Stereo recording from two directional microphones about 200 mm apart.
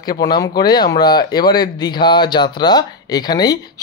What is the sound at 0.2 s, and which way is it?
Speech, 20° left (ahead or behind).